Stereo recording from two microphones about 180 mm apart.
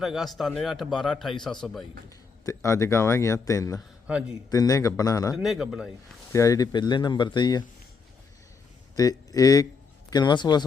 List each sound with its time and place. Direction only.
0.0 s a man's voice: centre (ahead or behind)
2.0 s speech: 15° left (ahead or behind)
4.0 s speech: 5° right (ahead or behind)
4.4 s speech: 20° left (ahead or behind)
5.4 s a man's voice: centre (ahead or behind)
6.3 s speech: 15° left (ahead or behind)
9.0 s speech: 20° left (ahead or behind)